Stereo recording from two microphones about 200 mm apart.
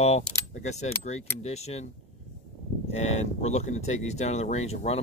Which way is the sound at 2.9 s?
35° left (ahead or behind).